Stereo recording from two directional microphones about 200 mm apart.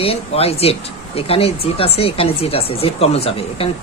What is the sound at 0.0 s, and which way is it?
Speech, 30° left (ahead or behind).